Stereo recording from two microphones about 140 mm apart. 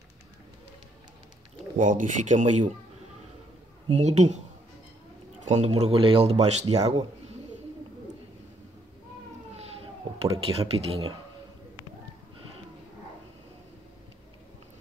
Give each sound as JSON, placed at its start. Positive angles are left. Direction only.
{"t": 1.8, "sound": "speech", "side_deg": -65}
{"t": 3.9, "sound": "speech", "side_deg": -55}
{"t": 5.4, "sound": "speech", "side_deg": -55}
{"t": 9.6, "sound": "a sound", "side_deg": -45}